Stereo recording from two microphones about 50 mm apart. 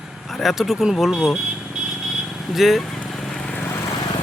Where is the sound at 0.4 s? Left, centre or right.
Centre.